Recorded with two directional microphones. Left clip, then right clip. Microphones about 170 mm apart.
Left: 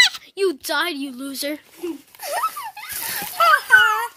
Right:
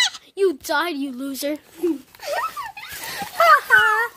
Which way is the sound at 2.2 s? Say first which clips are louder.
Left 1 dB; 55° left (ahead or behind).